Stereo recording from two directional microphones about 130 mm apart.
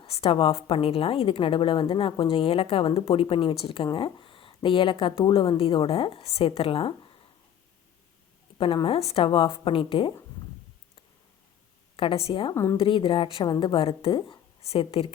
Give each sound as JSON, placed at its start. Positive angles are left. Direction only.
{"t": 0.0, "sound": "a woman's voice", "side_deg": 45}
{"t": 8.5, "sound": "a woman's voice", "side_deg": 40}
{"t": 11.9, "sound": "a woman's voice", "side_deg": 40}